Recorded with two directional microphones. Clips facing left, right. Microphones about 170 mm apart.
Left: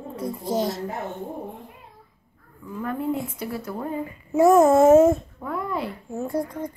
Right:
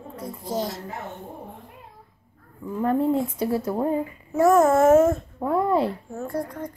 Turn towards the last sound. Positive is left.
turn(degrees=10)  # may be behind; listen again after turning